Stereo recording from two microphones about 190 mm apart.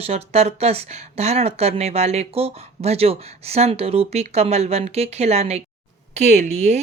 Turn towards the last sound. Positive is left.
turn(degrees=-35)  # may be behind; listen again after turning